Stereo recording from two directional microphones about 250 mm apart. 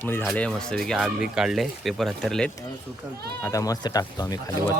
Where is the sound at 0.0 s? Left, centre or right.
Centre.